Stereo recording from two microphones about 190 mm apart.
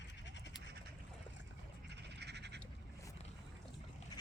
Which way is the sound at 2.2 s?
60° right (ahead or behind).